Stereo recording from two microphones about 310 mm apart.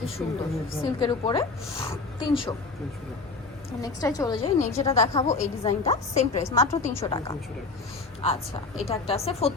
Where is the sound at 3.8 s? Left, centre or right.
Centre.